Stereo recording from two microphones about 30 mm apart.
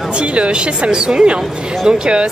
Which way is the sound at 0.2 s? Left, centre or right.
Right.